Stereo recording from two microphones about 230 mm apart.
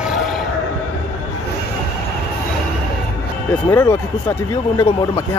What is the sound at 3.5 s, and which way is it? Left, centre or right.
Speech, centre.